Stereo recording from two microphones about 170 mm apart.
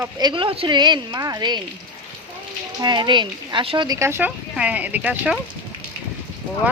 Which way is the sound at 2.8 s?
25° right (ahead or behind).